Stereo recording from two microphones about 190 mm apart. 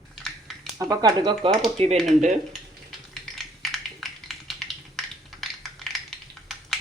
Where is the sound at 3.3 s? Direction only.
Centre (ahead or behind).